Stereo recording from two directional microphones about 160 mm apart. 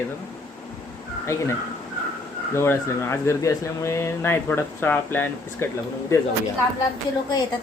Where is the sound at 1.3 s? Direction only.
15° left (ahead or behind).